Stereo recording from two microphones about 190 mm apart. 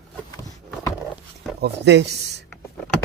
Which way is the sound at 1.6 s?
65° right (ahead or behind).